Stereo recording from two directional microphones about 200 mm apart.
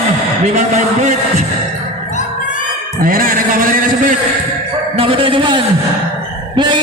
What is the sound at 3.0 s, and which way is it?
A man's voice, 45° right (ahead or behind).